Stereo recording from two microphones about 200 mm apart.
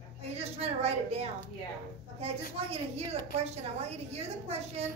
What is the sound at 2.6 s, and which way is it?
A woman's voice, 30° right (ahead or behind).